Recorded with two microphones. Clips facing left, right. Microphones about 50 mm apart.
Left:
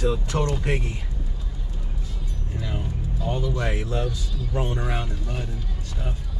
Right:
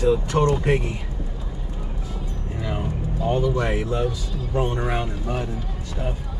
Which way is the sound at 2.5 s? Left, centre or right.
Right.